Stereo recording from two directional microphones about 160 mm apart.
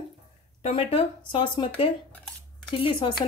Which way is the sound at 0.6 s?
35° left (ahead or behind).